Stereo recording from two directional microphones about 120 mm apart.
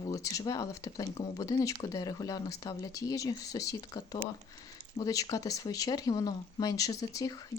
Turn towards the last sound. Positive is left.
turn(degrees=30)  # may be behind; listen again after turning